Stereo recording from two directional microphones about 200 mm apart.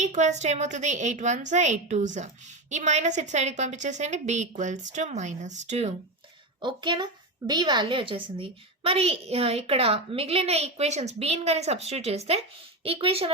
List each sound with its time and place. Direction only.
0.0 s a woman's voice: 35° right (ahead or behind)
6.6 s a woman's voice: 20° right (ahead or behind)